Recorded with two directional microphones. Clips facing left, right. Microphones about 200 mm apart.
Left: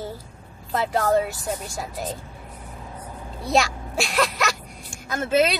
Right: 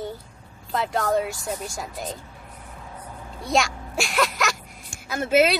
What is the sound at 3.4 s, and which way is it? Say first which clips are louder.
Speech: left 2 dB; centre (ahead or behind).